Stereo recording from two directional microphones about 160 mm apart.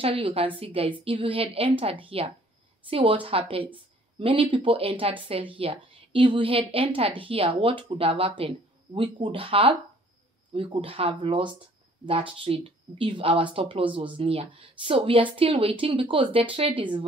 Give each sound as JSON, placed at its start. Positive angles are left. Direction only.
{"t": 0.0, "sound": "speech", "side_deg": -35}